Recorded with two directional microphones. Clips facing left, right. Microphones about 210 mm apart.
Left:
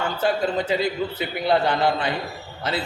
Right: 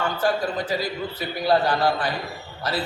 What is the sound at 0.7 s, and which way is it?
A man's voice, 25° left (ahead or behind).